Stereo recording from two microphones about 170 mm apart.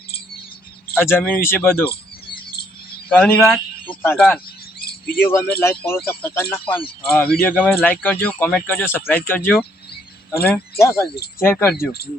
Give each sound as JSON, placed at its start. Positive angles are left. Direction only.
{"t": 0.9, "sound": "speech", "side_deg": 10}
{"t": 3.1, "sound": "speech", "side_deg": 10}
{"t": 4.8, "sound": "bird", "side_deg": 65}
{"t": 5.2, "sound": "speech", "side_deg": 10}